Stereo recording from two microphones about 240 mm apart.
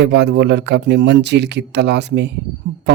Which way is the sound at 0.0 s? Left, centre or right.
Right.